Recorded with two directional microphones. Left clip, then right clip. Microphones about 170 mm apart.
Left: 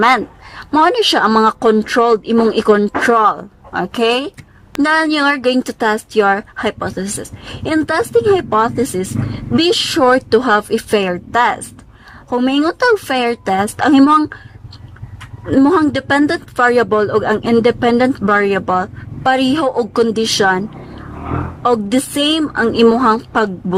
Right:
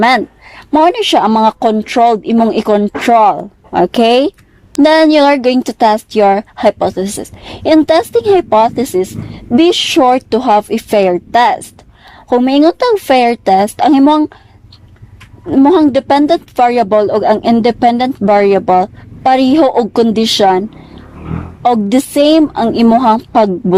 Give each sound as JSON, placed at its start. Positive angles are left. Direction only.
{"t": 0.5, "sound": "a woman's voice", "side_deg": -25}
{"t": 15.5, "sound": "a woman's voice", "side_deg": -20}